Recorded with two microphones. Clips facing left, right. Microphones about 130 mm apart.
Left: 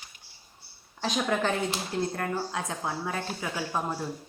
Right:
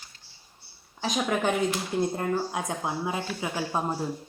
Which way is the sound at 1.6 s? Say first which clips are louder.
Right 3 dB; 25° left (ahead or behind).